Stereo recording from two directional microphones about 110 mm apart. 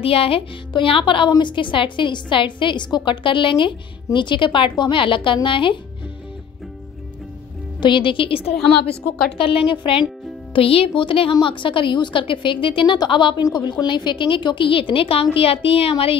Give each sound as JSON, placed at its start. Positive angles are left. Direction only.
{"t": 0.0, "sound": "a woman's voice", "side_deg": 60}
{"t": 7.8, "sound": "a woman's voice", "side_deg": 50}